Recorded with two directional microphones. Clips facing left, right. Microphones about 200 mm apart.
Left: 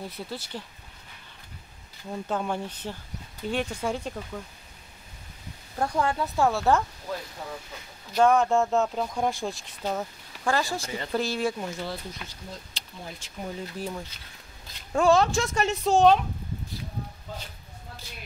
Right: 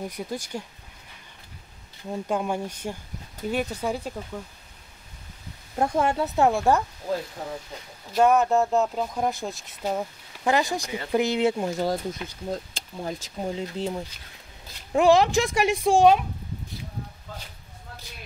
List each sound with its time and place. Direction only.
0.0 s speech: 15° right (ahead or behind)
2.2 s speech: 10° right (ahead or behind)
5.8 s speech: 20° right (ahead or behind)
8.1 s speech: 5° right (ahead or behind); by 13.3 s 50° right (ahead or behind)
13.4 s speech: 25° right (ahead or behind); by 16.3 s 10° right (ahead or behind)